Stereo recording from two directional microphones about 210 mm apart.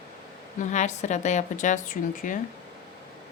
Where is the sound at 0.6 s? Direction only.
35° left (ahead or behind).